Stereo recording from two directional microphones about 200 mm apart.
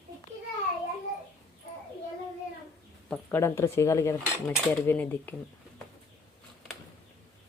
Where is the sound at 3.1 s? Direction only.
10° left (ahead or behind).